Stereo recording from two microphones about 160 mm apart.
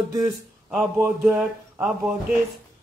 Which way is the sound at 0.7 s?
Centre (ahead or behind).